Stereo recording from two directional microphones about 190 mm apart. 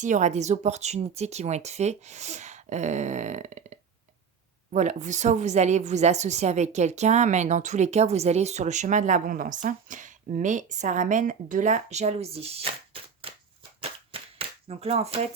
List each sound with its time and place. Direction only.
0.0 s a woman's voice: 40° right (ahead or behind)
14.1 s cap gun: 30° right (ahead or behind)